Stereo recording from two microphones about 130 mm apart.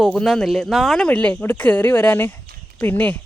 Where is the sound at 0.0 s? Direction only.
Centre (ahead or behind).